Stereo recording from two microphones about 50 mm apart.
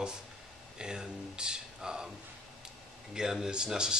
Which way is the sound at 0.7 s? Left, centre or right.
Centre.